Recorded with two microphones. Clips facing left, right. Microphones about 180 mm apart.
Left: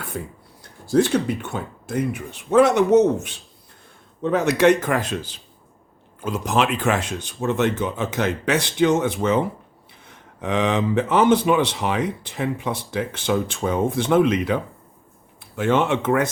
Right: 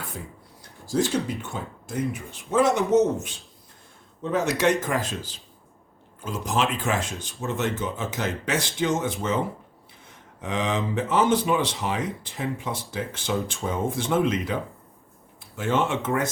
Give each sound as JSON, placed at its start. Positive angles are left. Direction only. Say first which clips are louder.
{"t": 0.1, "sound": "speech", "louder": "left 7 dB", "side_deg": 60}